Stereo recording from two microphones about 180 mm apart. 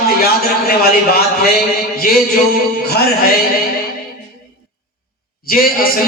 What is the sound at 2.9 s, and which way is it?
Speech, 60° left (ahead or behind).